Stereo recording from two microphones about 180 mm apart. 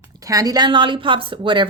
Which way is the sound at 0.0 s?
20° right (ahead or behind).